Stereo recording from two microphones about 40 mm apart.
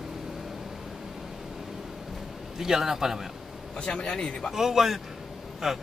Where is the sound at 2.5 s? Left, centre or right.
Centre.